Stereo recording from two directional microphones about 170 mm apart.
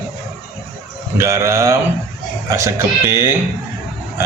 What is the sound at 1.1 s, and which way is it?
A man's voice, 20° right (ahead or behind).